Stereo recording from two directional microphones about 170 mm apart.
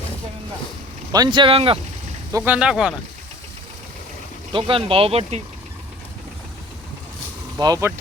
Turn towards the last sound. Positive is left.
turn(degrees=-20)  # may be behind; listen again after turning